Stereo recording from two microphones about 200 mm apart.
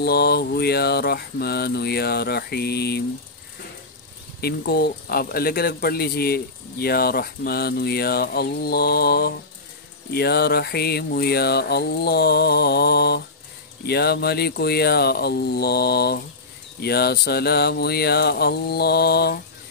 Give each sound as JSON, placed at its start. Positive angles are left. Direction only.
{"t": 0.0, "sound": "speech", "side_deg": 55}
{"t": 4.4, "sound": "speech", "side_deg": 50}